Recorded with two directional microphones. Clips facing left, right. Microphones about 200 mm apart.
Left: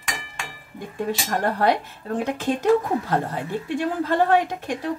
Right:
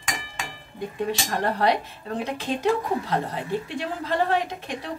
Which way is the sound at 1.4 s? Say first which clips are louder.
Left 1 dB; 50° left (ahead or behind).